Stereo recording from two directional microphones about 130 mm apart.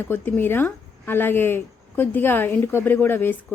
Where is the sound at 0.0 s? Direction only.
15° left (ahead or behind).